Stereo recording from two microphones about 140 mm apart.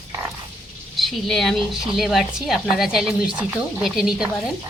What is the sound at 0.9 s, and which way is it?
Speech, centre (ahead or behind).